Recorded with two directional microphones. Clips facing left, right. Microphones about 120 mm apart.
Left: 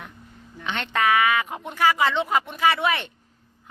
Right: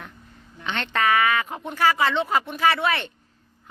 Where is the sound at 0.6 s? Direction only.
10° left (ahead or behind).